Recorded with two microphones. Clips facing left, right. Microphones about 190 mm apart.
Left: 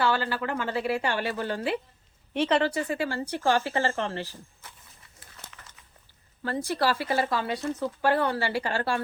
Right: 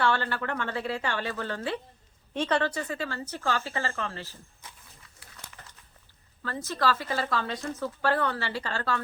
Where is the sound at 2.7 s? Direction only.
25° left (ahead or behind).